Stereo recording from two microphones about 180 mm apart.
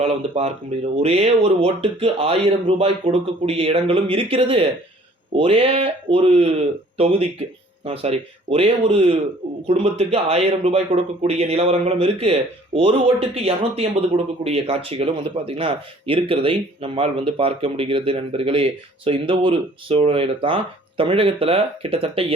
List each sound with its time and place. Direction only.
0.0 s speech: 35° right (ahead or behind)